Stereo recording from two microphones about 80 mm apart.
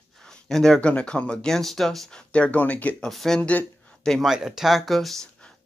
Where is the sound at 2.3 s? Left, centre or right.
Centre.